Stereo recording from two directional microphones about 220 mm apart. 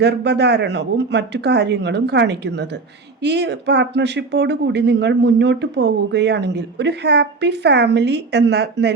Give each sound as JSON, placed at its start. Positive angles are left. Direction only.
{"t": 0.0, "sound": "speech", "side_deg": -50}